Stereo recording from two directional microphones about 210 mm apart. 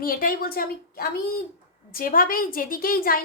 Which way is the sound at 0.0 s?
45° left (ahead or behind).